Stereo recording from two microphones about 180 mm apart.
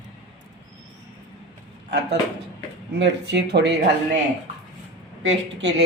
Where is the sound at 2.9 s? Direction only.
70° right (ahead or behind).